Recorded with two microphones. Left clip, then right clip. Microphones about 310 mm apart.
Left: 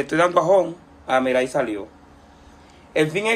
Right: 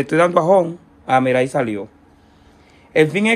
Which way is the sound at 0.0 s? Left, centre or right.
Right.